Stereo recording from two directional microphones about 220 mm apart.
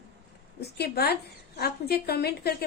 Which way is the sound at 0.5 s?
50° left (ahead or behind).